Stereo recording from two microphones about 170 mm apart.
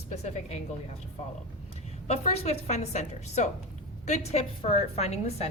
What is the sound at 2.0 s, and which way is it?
A woman's voice, 40° left (ahead or behind).